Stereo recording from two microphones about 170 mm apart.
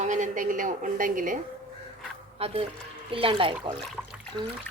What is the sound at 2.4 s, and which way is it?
Speech, 35° right (ahead or behind).